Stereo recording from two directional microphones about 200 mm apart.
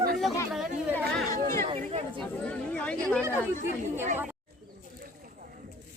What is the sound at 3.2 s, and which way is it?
Speech, 15° right (ahead or behind).